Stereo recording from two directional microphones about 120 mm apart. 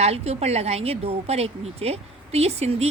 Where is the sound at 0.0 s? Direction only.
60° right (ahead or behind).